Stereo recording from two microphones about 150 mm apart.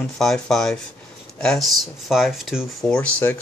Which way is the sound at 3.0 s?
15° left (ahead or behind).